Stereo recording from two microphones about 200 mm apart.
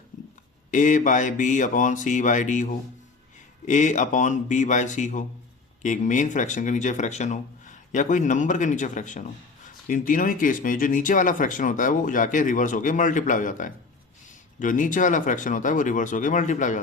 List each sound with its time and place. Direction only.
0.7 s speech: 40° left (ahead or behind)
3.7 s speech: 40° left (ahead or behind)